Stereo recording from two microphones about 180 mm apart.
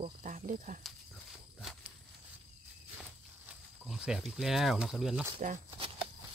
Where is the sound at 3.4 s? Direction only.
5° right (ahead or behind).